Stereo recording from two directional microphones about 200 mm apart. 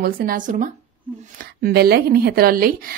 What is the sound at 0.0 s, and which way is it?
A woman's voice, 50° right (ahead or behind).